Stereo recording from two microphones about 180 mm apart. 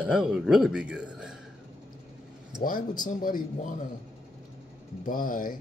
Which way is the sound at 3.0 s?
50° left (ahead or behind).